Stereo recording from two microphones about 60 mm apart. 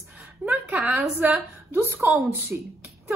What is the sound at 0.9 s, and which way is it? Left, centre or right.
A woman's voice, right.